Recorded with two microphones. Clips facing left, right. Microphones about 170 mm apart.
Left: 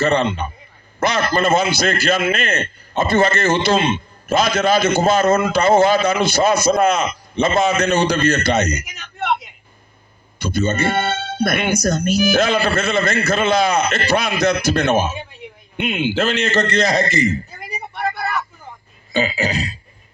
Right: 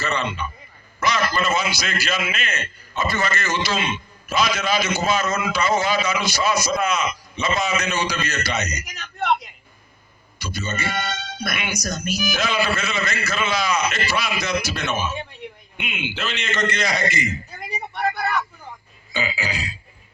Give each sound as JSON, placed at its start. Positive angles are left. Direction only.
{"t": 0.0, "sound": "a man's voice", "side_deg": 55}
{"t": 8.8, "sound": "a man's voice", "side_deg": 0}
{"t": 10.4, "sound": "a man's voice", "side_deg": 50}
{"t": 15.1, "sound": "a man's voice", "side_deg": 0}
{"t": 15.8, "sound": "a man's voice", "side_deg": 40}
{"t": 17.6, "sound": "vehicle", "side_deg": 0}
{"t": 19.2, "sound": "a man's voice", "side_deg": 40}